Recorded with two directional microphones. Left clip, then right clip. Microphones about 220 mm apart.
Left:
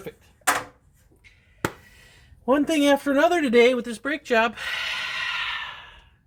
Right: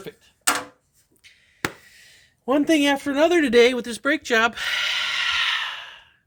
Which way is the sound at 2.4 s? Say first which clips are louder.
Right 1 dB; 50° right (ahead or behind).